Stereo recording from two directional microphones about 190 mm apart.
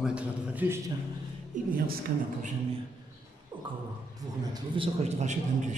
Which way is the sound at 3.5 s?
25° right (ahead or behind).